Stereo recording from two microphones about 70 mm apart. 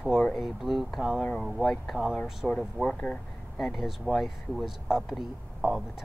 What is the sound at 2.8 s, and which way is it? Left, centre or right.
Speech, centre.